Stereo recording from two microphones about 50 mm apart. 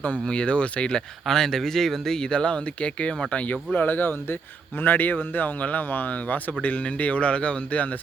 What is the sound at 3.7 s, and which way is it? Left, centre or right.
A man's voice, left.